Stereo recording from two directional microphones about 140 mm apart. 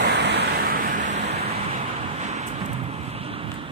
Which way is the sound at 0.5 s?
90° right.